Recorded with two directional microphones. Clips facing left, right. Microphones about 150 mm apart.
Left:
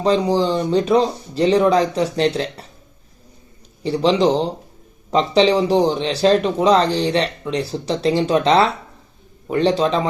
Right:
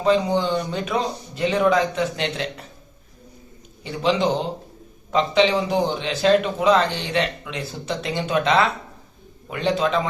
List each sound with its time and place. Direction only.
0.0 s speech: 35° left (ahead or behind)
3.8 s speech: 35° left (ahead or behind)